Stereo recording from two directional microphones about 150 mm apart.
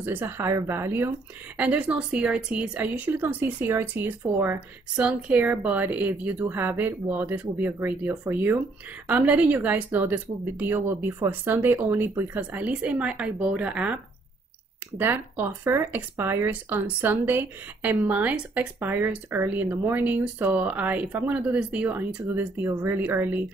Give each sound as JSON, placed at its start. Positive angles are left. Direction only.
{"t": 0.0, "sound": "speech", "side_deg": -15}
{"t": 15.0, "sound": "speech", "side_deg": -15}